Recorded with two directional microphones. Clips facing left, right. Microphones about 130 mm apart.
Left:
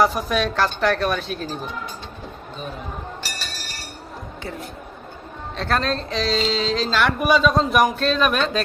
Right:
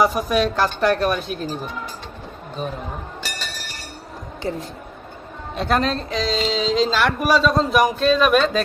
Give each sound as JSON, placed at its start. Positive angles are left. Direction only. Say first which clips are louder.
{"t": 0.0, "sound": "a woman's voice", "louder": "right 1 dB", "side_deg": -10}
{"t": 4.4, "sound": "speech", "louder": "right 8 dB", "side_deg": -40}
{"t": 5.5, "sound": "a woman's voice", "louder": "right 2 dB", "side_deg": -10}
{"t": 7.0, "sound": "speech", "louder": "even", "side_deg": 0}